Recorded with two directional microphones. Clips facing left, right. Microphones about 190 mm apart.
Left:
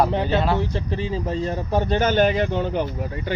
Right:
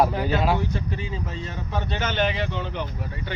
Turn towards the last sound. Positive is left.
turn(degrees=45)  # may be behind; listen again after turning